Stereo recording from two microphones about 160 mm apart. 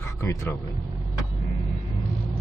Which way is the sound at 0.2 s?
20° left (ahead or behind).